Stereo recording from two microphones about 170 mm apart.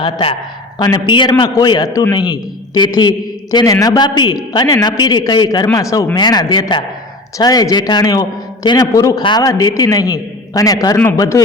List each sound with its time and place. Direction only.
0.0 s a woman's voice: 30° left (ahead or behind)